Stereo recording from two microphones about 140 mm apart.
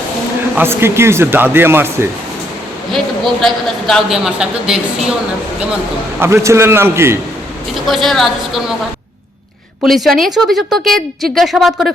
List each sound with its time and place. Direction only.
0.5 s speech: 15° right (ahead or behind)
2.9 s a woman's voice: centre (ahead or behind)
6.1 s a man's voice: 20° right (ahead or behind)
7.9 s a woman's voice: centre (ahead or behind)
9.8 s a woman's voice: centre (ahead or behind)